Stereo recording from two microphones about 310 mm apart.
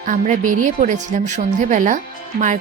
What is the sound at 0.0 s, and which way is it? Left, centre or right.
A woman's voice, right.